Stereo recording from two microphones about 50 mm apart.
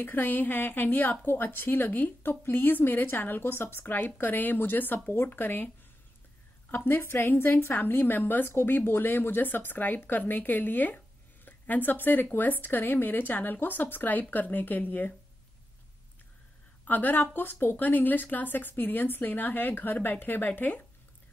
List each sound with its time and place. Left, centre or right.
0.0 s a woman's voice: left
5.1 s a woman's voice: left
6.7 s a woman's voice: left
16.8 s a woman's voice: left